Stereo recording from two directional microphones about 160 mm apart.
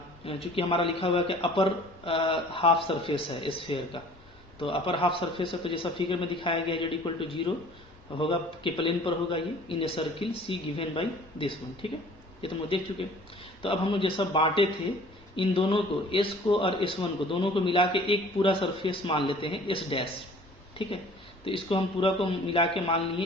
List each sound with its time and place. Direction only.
0.3 s speech: 35° left (ahead or behind)
21.4 s speech: 35° left (ahead or behind)